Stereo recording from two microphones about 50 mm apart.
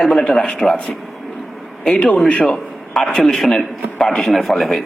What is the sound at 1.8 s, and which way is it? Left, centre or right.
Speech, left.